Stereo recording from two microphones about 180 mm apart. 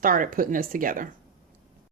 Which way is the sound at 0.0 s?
50° right (ahead or behind).